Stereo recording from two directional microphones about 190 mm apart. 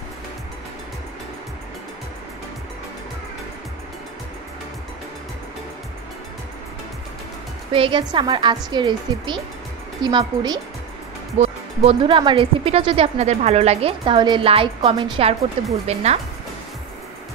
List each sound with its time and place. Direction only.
7.7 s speech: 25° right (ahead or behind)
11.3 s speech: 35° right (ahead or behind)